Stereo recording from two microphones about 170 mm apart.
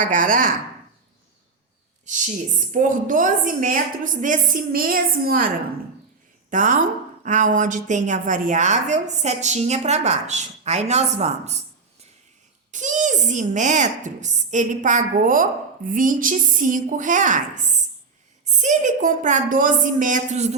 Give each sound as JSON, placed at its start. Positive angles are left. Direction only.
{"t": 0.0, "sound": "a woman's voice", "side_deg": -50}
{"t": 2.0, "sound": "a woman's voice", "side_deg": -45}
{"t": 6.5, "sound": "a woman's voice", "side_deg": -50}
{"t": 12.7, "sound": "a woman's voice", "side_deg": -45}